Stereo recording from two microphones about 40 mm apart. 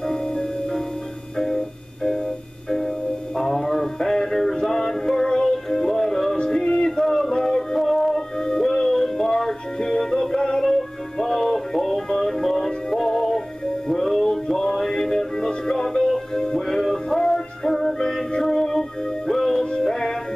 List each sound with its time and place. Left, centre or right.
0.1 s music: centre
3.3 s music: centre
6.3 s music: left
7.0 s music: centre